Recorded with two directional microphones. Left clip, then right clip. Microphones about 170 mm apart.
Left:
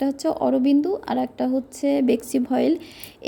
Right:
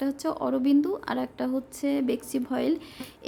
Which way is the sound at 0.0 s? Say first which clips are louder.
Left 6 dB; 15° left (ahead or behind).